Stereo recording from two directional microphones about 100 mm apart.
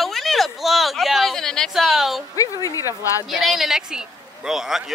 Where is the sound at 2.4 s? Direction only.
35° left (ahead or behind).